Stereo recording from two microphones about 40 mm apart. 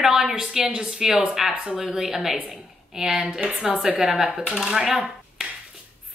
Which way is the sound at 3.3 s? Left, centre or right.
Centre.